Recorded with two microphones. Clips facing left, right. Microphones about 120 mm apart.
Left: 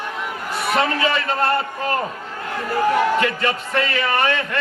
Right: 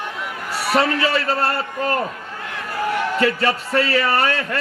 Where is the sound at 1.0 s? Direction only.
35° right (ahead or behind).